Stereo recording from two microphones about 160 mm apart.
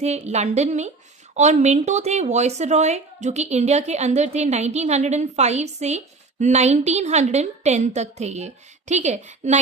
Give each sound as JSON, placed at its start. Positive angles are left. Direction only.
{"t": 0.0, "sound": "a woman's voice", "side_deg": -45}